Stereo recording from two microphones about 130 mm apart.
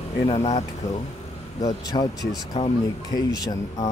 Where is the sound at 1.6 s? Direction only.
30° left (ahead or behind).